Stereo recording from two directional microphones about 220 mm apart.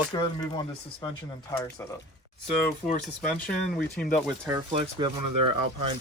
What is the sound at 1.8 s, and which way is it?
Speech, 10° left (ahead or behind).